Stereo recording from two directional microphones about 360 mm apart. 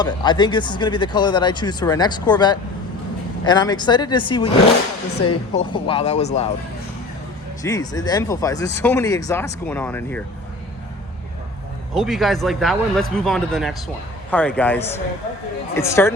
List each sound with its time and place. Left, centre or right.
0.0 s speech: centre
5.5 s speech: centre
7.6 s speech: centre
11.9 s speech: centre